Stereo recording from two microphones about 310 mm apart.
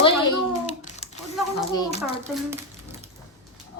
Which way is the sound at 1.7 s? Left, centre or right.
Centre.